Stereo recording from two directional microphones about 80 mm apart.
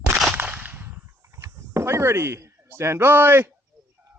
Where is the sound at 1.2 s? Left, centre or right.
Right.